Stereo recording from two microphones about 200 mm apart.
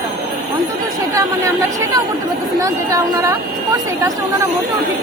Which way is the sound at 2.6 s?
15° right (ahead or behind).